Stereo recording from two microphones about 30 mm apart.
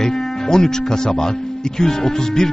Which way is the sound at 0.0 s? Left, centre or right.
Centre.